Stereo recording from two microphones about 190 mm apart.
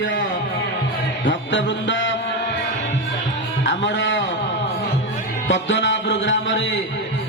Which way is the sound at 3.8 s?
75° left (ahead or behind).